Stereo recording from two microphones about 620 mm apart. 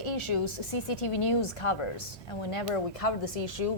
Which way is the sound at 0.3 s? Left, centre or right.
Left.